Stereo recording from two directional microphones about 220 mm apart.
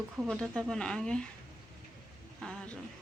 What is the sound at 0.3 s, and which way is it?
Speech, 5° left (ahead or behind).